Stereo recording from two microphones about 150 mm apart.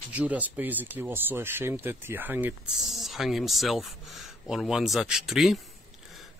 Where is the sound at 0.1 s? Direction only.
10° right (ahead or behind).